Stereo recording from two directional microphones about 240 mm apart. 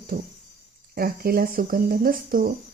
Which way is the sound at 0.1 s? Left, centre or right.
Right.